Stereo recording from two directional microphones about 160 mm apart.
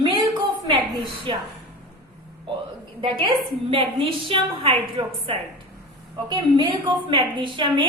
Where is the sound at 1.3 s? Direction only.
30° right (ahead or behind).